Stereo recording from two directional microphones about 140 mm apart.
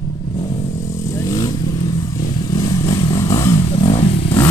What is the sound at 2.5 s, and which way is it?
Motorcycle, 30° left (ahead or behind).